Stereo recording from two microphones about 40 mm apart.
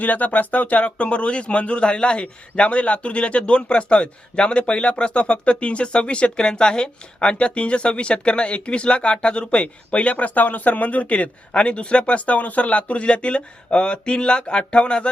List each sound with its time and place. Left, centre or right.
0.0 s speech: left